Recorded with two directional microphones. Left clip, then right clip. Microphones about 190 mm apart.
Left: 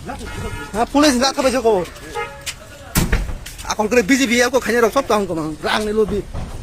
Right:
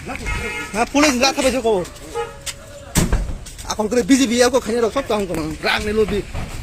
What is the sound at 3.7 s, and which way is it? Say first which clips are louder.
Speech: left 2 dB; centre (ahead or behind).